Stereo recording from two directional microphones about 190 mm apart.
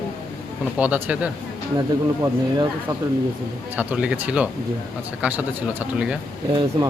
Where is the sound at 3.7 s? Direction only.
5° right (ahead or behind).